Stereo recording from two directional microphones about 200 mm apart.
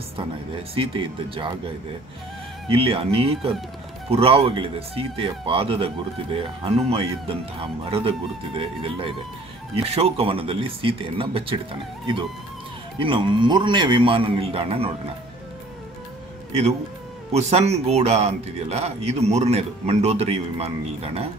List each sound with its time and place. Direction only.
0.7 s speech: 25° right (ahead or behind)
2.7 s speech: 30° right (ahead or behind)
13.0 s speech: 25° right (ahead or behind)
17.3 s a man's voice: 35° right (ahead or behind)